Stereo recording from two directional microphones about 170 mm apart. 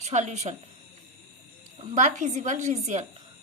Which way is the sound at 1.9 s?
45° right (ahead or behind).